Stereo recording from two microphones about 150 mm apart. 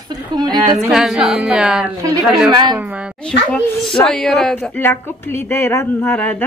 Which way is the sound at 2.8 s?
10° right (ahead or behind).